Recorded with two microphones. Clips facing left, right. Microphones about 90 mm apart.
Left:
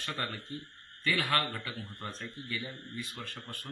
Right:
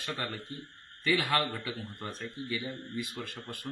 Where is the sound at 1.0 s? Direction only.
15° right (ahead or behind).